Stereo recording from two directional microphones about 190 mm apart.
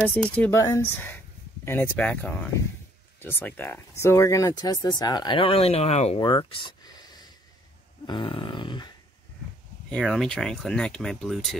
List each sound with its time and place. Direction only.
0.1 s speech: 5° left (ahead or behind); by 6.1 s 35° left (ahead or behind)
6.1 s a sound: 25° left (ahead or behind)
8.1 s speech: 25° left (ahead or behind)
9.8 s speech: 5° left (ahead or behind)